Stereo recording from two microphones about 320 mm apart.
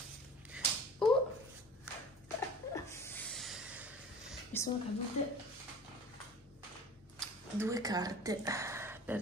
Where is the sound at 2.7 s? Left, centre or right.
Centre.